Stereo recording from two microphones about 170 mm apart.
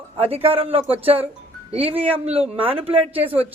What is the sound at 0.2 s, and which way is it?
Speech, 35° right (ahead or behind).